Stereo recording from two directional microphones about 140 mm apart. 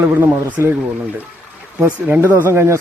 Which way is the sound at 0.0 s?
15° right (ahead or behind).